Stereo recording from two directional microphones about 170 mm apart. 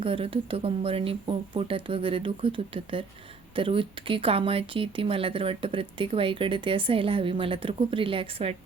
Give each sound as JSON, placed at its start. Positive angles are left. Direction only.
{"t": 0.0, "sound": "speech", "side_deg": -30}